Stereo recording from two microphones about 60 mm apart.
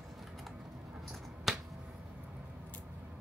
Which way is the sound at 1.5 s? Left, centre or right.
Centre.